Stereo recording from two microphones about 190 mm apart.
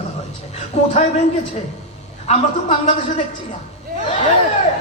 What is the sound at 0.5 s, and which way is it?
Speech, 35° left (ahead or behind).